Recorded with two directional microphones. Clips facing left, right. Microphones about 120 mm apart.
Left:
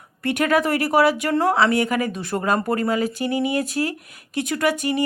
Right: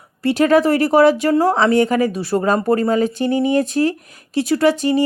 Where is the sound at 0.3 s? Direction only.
30° right (ahead or behind).